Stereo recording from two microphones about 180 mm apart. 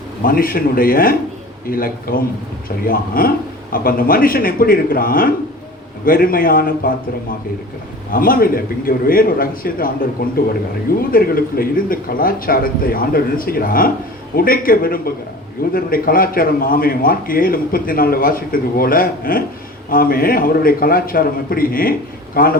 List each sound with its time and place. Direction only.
0.3 s a man's voice: 55° left (ahead or behind)
8.1 s a man's voice: 55° left (ahead or behind)